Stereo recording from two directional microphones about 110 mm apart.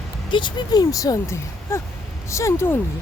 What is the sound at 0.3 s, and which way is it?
Speech, 45° left (ahead or behind).